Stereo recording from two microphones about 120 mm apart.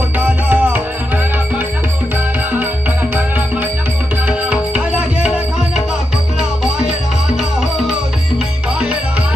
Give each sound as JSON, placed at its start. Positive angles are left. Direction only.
{"t": 0.5, "sound": "music", "side_deg": -15}
{"t": 4.3, "sound": "music", "side_deg": -10}